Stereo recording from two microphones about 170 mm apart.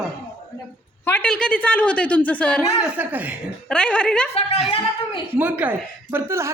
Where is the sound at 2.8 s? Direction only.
10° right (ahead or behind).